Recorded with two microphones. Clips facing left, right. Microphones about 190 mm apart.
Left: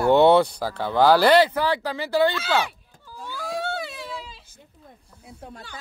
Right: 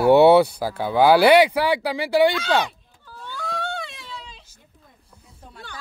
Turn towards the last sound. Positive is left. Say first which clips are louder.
# left 3 dB
turn(degrees=5)  # may be behind; listen again after turning